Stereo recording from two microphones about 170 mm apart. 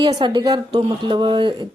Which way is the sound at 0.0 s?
25° right (ahead or behind).